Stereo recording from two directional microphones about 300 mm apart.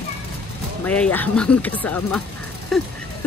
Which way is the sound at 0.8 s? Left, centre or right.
Centre.